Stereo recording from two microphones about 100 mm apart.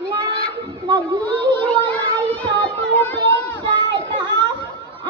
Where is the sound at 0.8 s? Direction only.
45° right (ahead or behind).